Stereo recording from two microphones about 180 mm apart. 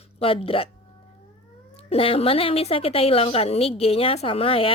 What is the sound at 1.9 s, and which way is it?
A woman's voice, 35° left (ahead or behind).